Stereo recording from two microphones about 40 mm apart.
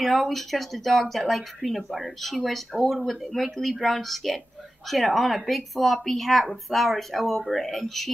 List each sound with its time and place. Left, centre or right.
0.0 s speech: centre